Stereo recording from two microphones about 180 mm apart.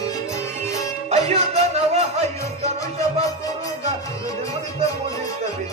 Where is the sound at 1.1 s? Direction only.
35° right (ahead or behind).